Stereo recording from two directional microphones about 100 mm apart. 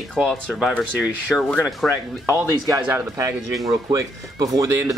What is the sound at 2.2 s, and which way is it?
Speech, 30° right (ahead or behind).